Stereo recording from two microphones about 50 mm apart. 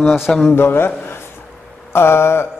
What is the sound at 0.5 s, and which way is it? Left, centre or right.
Mantra, left.